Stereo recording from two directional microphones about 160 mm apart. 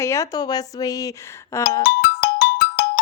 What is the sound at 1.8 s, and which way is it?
Music, 70° left (ahead or behind).